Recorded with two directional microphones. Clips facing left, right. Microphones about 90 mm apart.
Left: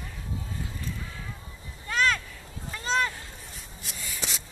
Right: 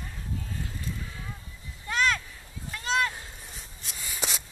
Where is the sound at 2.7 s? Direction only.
Centre (ahead or behind).